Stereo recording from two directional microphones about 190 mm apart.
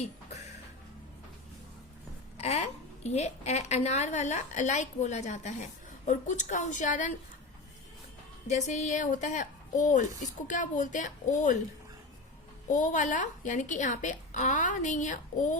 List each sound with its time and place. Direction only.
2.4 s a woman's voice: 35° left (ahead or behind)
8.4 s a woman's voice: 40° left (ahead or behind)
12.7 s a woman's voice: 40° left (ahead or behind)